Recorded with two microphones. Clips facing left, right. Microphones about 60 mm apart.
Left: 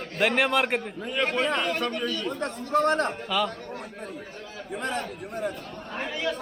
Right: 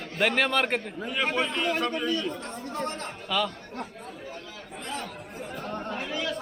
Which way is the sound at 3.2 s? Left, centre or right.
Centre.